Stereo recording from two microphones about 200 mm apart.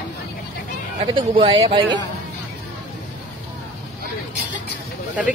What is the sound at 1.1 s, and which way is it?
Speech, 25° right (ahead or behind).